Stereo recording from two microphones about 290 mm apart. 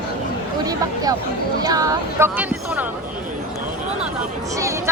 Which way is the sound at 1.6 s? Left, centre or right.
Centre.